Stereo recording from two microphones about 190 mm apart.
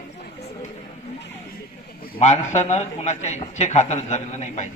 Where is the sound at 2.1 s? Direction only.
35° left (ahead or behind).